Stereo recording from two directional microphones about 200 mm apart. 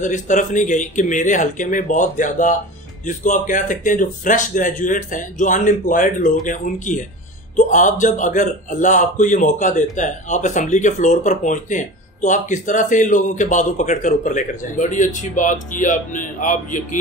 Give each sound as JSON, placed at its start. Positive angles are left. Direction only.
{"t": 0.0, "sound": "a man's voice", "side_deg": 40}